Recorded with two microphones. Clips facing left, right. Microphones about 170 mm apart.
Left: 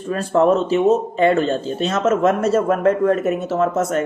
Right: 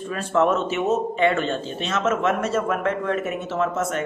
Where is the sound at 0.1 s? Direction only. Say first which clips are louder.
Left 5 dB; 35° left (ahead or behind).